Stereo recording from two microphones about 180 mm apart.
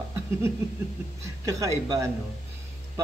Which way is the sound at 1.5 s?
20° right (ahead or behind).